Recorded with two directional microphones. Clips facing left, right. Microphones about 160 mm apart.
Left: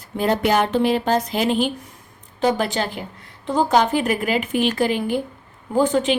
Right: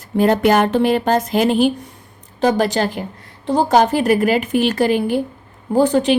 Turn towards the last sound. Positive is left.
turn(degrees=-35)  # may be behind; listen again after turning